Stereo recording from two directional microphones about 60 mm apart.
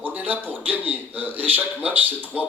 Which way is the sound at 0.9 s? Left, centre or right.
Right.